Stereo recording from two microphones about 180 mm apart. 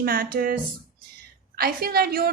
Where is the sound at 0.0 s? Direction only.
55° right (ahead or behind).